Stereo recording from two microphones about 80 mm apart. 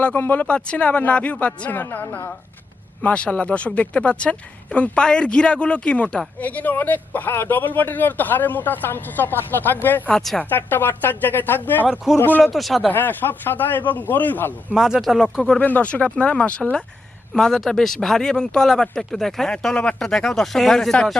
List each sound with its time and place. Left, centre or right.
0.0 s speech: left
10.1 s speech: centre
10.5 s speech: left
12.4 s speech: centre
12.9 s speech: left
14.7 s speech: centre
15.4 s speech: centre